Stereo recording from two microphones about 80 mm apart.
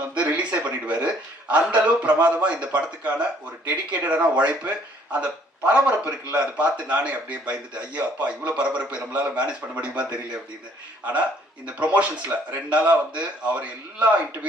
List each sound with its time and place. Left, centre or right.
0.1 s a man's voice: centre